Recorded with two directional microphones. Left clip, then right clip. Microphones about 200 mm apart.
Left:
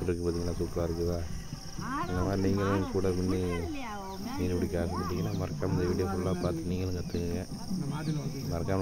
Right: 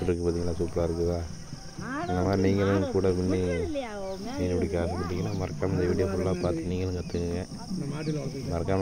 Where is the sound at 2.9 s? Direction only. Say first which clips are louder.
Right 5 dB; 5° right (ahead or behind).